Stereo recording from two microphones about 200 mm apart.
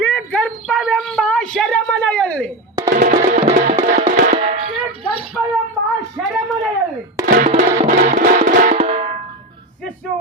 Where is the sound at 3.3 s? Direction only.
40° right (ahead or behind).